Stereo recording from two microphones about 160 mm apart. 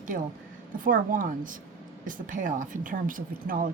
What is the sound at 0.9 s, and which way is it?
Speech, 60° right (ahead or behind).